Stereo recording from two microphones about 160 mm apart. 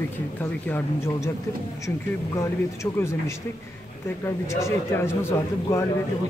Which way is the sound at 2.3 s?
15° left (ahead or behind).